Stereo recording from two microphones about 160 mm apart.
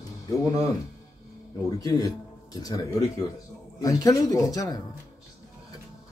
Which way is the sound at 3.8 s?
20° left (ahead or behind).